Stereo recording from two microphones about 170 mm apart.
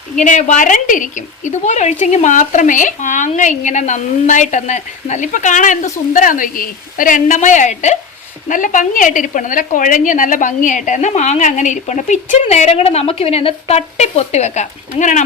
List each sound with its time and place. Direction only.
0.3 s speech: 45° left (ahead or behind)